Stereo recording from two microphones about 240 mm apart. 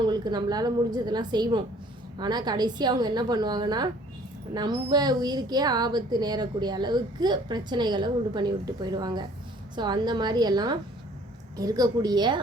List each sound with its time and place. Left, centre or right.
0.1 s a woman's voice: centre